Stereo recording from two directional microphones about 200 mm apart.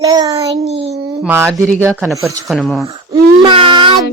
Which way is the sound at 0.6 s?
30° right (ahead or behind).